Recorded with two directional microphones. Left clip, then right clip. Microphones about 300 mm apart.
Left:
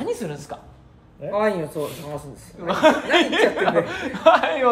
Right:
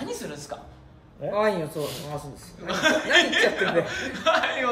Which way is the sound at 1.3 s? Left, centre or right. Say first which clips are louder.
Left 3 dB; centre.